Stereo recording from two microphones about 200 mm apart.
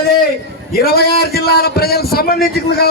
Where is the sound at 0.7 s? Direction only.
50° left (ahead or behind).